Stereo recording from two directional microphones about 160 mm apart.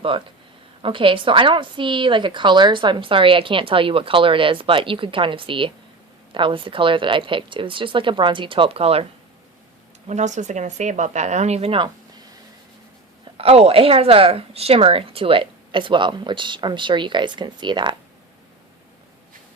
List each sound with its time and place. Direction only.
0.0 s a woman's voice: 30° right (ahead or behind)
10.1 s speech: 45° right (ahead or behind)
13.3 s a woman's voice: 40° right (ahead or behind)